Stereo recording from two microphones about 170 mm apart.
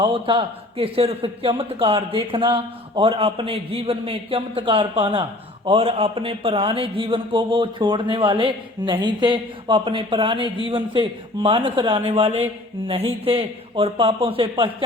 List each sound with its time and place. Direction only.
0.0 s a man's voice: 30° right (ahead or behind)